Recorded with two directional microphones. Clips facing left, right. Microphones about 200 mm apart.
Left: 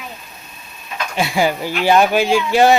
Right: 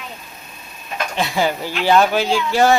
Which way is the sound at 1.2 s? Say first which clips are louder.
Left 3 dB; 10° left (ahead or behind).